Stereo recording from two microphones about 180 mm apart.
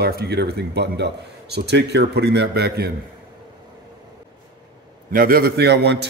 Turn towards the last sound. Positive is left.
turn(degrees=-70)  # may be behind; listen again after turning